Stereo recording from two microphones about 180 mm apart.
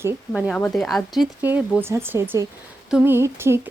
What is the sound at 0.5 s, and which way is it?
Speech, 5° left (ahead or behind).